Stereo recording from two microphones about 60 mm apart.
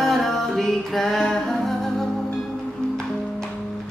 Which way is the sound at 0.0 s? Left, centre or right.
Centre.